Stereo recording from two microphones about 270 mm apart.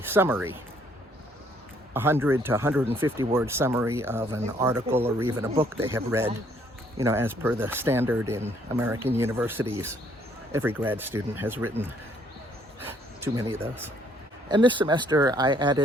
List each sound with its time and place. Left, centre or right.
0.0 s speech: centre
1.9 s speech: centre